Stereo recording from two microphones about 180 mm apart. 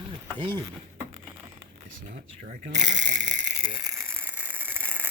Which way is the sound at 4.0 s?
15° right (ahead or behind).